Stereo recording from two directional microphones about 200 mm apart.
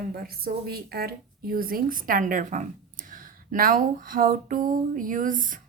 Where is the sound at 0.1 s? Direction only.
50° right (ahead or behind).